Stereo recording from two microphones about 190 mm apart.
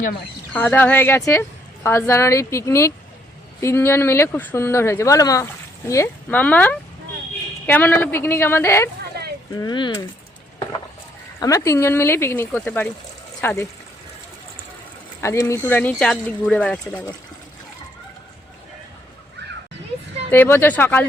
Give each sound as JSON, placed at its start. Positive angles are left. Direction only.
{"t": 0.5, "sound": "a woman's voice", "side_deg": 10}
{"t": 9.2, "sound": "a sound", "side_deg": -55}
{"t": 9.6, "sound": "speech", "side_deg": 25}
{"t": 11.3, "sound": "a woman's voice", "side_deg": 15}
{"t": 15.2, "sound": "a woman's voice", "side_deg": 15}
{"t": 20.3, "sound": "a woman's voice", "side_deg": 10}